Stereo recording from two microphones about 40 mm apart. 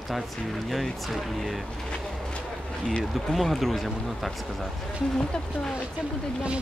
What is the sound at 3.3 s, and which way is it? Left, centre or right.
Speech, centre.